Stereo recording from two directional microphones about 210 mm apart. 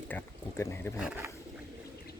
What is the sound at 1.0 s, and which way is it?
Speech, 5° right (ahead or behind).